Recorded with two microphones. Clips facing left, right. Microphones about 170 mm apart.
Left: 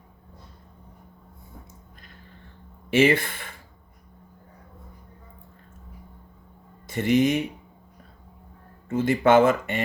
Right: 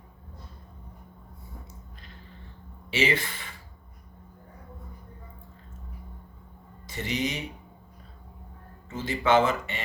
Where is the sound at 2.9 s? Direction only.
55° left (ahead or behind).